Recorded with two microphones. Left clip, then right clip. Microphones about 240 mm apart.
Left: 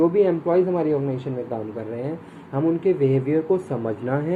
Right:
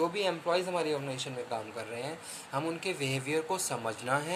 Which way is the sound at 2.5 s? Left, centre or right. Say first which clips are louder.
Left 13 dB; right.